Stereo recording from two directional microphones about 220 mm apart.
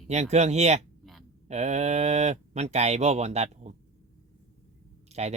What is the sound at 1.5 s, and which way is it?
Cattle, 30° right (ahead or behind).